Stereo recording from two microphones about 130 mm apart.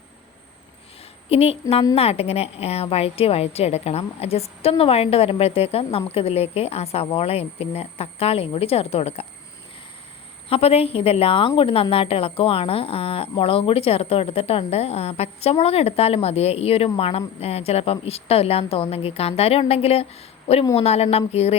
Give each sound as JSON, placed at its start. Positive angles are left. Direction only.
{"t": 1.3, "sound": "a woman's voice", "side_deg": 50}
{"t": 10.5, "sound": "a woman's voice", "side_deg": 50}